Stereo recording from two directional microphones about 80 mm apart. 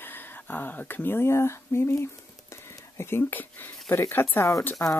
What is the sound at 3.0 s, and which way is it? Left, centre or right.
Speech, left.